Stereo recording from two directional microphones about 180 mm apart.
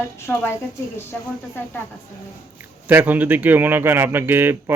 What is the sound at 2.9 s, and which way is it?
Speech, 10° right (ahead or behind).